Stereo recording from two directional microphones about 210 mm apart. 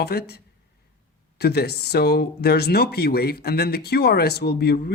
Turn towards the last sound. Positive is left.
turn(degrees=50)  # may be behind; listen again after turning